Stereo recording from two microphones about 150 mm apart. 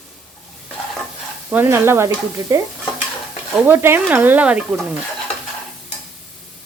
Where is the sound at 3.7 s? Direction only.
15° right (ahead or behind).